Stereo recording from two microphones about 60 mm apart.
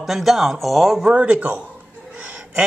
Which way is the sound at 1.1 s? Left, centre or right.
Right.